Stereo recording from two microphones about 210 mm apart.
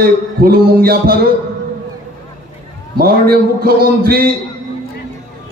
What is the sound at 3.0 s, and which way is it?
A man's voice, 45° right (ahead or behind).